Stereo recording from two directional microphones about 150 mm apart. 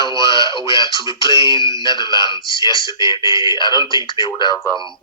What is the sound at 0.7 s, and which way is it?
Speech, 30° left (ahead or behind).